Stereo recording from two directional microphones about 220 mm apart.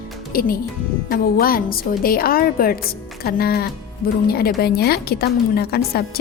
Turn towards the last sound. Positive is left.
turn(degrees=45)  # may be behind; listen again after turning